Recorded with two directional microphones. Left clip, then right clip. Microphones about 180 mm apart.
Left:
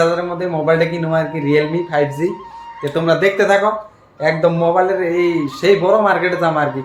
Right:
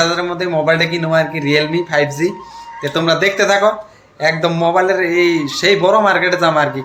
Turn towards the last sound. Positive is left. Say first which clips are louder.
# right 3 dB
turn(degrees=0)  # may be behind; listen again after turning